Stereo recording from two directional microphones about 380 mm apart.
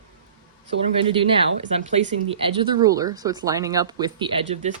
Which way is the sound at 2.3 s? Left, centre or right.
Centre.